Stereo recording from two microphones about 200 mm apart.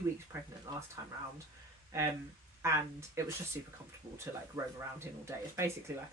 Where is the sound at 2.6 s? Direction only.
15° right (ahead or behind).